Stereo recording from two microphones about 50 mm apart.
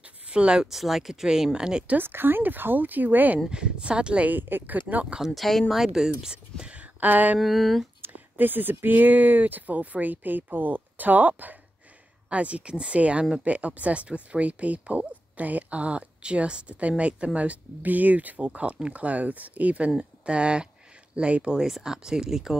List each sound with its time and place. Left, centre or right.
0.0 s a sound: right
0.7 s speech: centre
2.0 s speech: right
3.4 s speech: centre
4.3 s speech: right
5.2 s speech: centre
5.8 s speech: centre
6.6 s a sound: right
7.3 s speech: centre
8.0 s speech: right; by 13.5 s centre
13.5 s speech: right
21.6 s speech: centre